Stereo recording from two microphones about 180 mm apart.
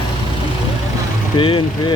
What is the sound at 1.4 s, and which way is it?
Speech, 30° left (ahead or behind).